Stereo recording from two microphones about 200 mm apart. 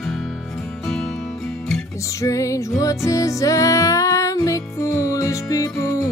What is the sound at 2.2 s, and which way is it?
Music, 15° left (ahead or behind).